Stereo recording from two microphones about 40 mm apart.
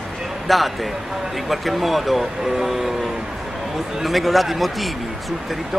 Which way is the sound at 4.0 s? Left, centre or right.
Centre.